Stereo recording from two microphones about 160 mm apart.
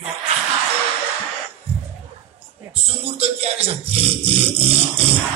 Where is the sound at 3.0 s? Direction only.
40° right (ahead or behind).